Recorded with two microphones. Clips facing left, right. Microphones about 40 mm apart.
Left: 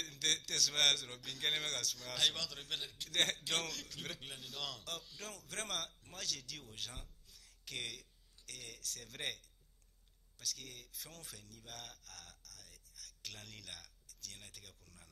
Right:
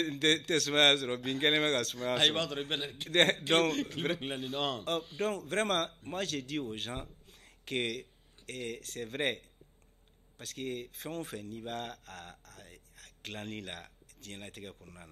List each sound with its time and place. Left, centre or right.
0.0 s a man's voice: right